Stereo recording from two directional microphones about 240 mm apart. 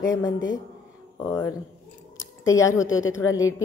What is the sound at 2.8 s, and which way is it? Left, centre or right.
Speech, left.